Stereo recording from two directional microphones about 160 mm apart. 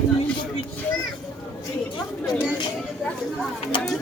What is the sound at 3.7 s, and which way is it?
Speech, 30° left (ahead or behind).